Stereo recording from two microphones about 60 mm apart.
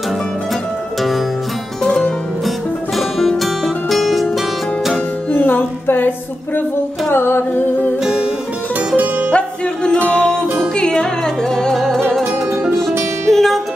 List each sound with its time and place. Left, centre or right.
3.0 s music: centre
5.3 s music: left
7.1 s humming: left
8.0 s music: centre
8.9 s music: right
10.1 s music: centre
13.3 s music: centre